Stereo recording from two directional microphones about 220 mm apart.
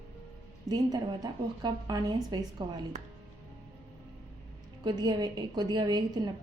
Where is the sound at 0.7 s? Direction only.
15° right (ahead or behind).